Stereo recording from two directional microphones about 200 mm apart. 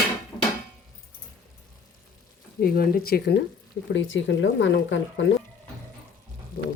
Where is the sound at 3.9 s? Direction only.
70° left (ahead or behind).